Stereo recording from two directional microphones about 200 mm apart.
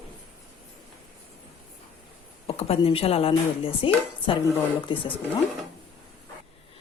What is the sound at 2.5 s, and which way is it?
A woman's voice, 30° left (ahead or behind).